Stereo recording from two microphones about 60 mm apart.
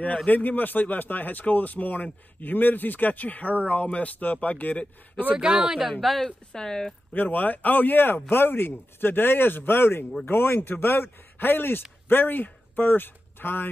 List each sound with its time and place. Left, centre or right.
0.0 s speech: left
5.3 s speech: centre
7.2 s speech: left